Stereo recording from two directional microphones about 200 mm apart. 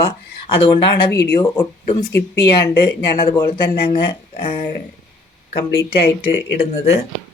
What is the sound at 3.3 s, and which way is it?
Speech, 20° left (ahead or behind).